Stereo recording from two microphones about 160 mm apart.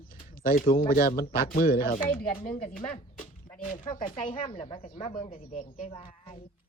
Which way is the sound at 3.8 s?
30° left (ahead or behind).